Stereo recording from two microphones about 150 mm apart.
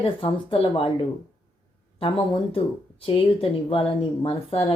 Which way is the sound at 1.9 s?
35° left (ahead or behind).